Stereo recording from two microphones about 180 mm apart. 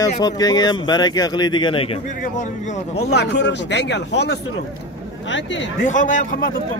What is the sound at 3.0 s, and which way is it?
Speech, 70° left (ahead or behind).